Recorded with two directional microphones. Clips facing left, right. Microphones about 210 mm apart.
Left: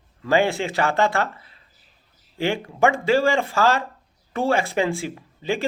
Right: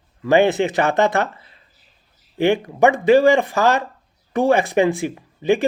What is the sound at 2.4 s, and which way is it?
Speech, 20° right (ahead or behind).